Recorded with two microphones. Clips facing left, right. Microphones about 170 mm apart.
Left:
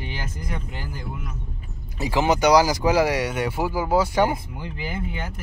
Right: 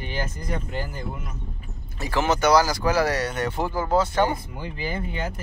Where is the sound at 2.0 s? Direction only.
15° left (ahead or behind).